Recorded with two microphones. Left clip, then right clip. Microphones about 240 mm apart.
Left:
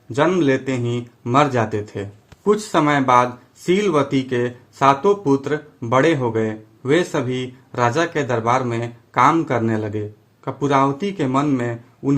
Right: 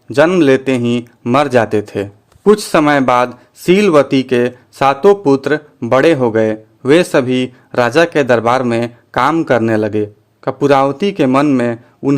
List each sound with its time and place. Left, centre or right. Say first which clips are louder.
0.1 s speech: right 8 dB; right